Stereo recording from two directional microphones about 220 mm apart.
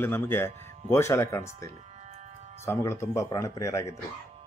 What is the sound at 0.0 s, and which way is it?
Speech, 10° left (ahead or behind).